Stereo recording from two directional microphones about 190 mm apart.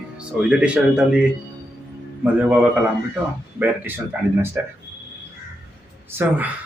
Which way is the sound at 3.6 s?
10° right (ahead or behind).